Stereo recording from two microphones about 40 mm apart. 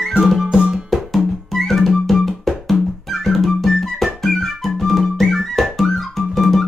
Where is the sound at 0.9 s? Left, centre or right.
Centre.